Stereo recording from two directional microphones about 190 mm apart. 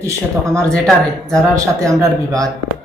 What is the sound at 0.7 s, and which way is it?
Speech, 5° left (ahead or behind).